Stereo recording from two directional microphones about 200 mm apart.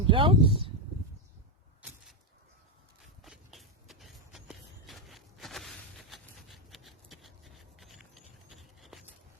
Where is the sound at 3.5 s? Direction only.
Centre (ahead or behind).